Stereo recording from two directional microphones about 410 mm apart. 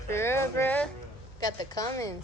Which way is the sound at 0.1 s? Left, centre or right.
Centre.